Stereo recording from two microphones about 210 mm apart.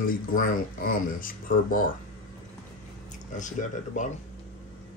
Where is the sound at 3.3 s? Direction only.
35° left (ahead or behind).